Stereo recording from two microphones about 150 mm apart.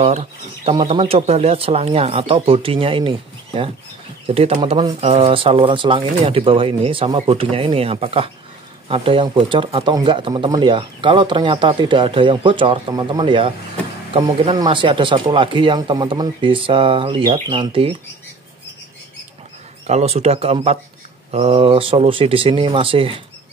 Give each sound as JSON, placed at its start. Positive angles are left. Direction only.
{"t": 0.0, "sound": "speech", "side_deg": -45}
{"t": 19.9, "sound": "speech", "side_deg": -45}